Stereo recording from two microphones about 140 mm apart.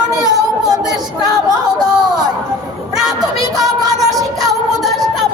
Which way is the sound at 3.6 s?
25° right (ahead or behind).